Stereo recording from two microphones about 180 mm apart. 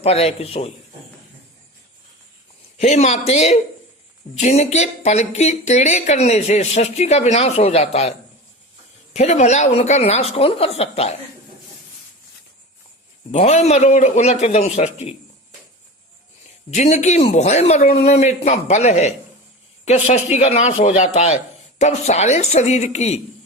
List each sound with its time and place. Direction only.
0.0 s speech: 35° left (ahead or behind)
2.7 s speech: 40° left (ahead or behind)
9.1 s speech: 40° left (ahead or behind)
13.3 s speech: 35° left (ahead or behind)
16.7 s speech: 40° left (ahead or behind)